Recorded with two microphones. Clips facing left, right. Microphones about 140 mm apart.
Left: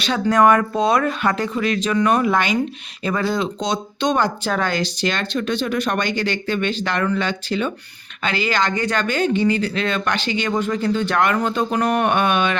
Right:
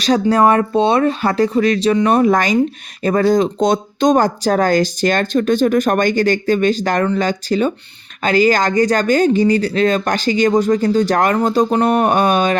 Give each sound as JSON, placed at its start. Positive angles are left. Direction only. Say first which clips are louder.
{"t": 0.0, "sound": "speech", "louder": "right 3 dB", "side_deg": -35}